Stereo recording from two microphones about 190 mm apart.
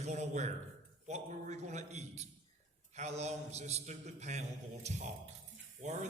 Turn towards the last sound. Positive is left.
turn(degrees=-35)  # may be behind; listen again after turning